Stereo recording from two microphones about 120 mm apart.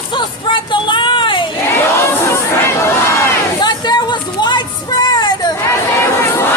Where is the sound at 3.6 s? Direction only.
35° left (ahead or behind).